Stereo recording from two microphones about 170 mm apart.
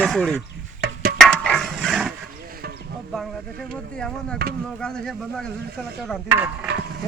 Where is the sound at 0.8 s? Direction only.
65° right (ahead or behind).